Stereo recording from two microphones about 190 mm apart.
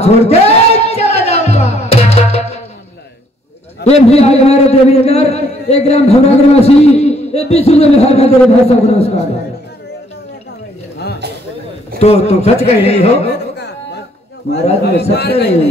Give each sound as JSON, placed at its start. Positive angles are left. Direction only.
{"t": 0.0, "sound": "music", "side_deg": 35}
{"t": 3.8, "sound": "a man's voice", "side_deg": 35}
{"t": 12.0, "sound": "a man's voice", "side_deg": 35}
{"t": 14.8, "sound": "a man's voice", "side_deg": 60}